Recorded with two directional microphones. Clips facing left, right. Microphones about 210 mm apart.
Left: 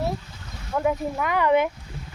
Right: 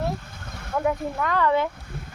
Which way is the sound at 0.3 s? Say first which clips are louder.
Right 2 dB; 55° right (ahead or behind).